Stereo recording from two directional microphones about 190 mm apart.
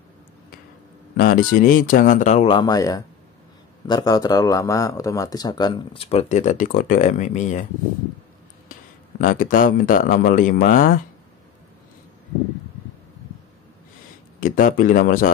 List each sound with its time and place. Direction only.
1.1 s speech: 50° left (ahead or behind)
2.4 s speech: 25° left (ahead or behind)
9.2 s speech: 45° left (ahead or behind)
14.4 s speech: 45° left (ahead or behind)